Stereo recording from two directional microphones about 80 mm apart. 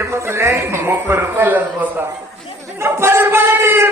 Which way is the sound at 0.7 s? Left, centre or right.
Right.